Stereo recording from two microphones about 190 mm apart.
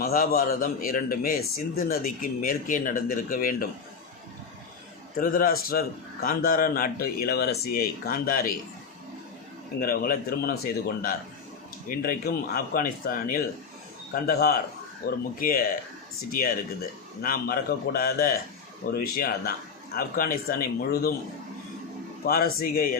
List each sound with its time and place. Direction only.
0.0 s a man's voice: 50° left (ahead or behind)
5.2 s a man's voice: 50° left (ahead or behind)
9.8 s a man's voice: 50° left (ahead or behind)
22.3 s a man's voice: 50° left (ahead or behind)